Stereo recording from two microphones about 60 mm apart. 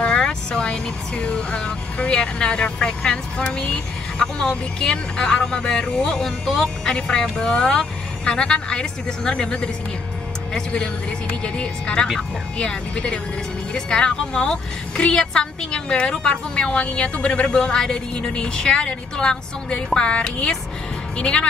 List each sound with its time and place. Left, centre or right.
0.0 s speech: centre
11.4 s speech: centre